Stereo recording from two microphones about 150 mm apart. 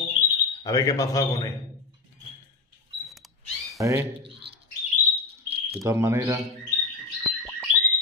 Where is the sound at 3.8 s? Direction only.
20° right (ahead or behind).